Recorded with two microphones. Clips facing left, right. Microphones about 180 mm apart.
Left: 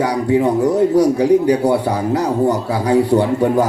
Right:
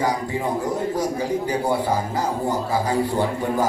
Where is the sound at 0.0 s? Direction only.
70° left (ahead or behind).